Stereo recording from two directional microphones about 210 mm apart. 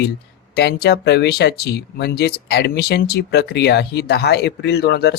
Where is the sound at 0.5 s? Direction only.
50° left (ahead or behind).